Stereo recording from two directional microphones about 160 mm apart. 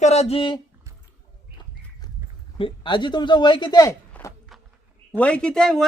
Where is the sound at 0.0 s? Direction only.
40° left (ahead or behind).